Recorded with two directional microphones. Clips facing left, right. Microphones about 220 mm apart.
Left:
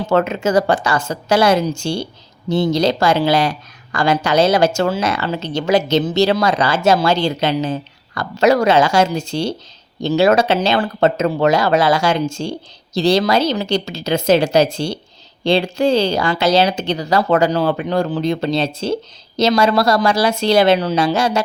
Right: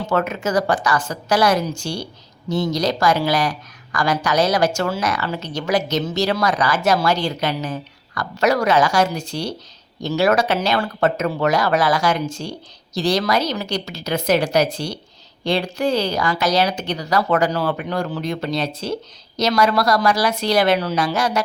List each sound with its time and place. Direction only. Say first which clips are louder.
0.1 s speech: left 5 dB; 25° left (ahead or behind)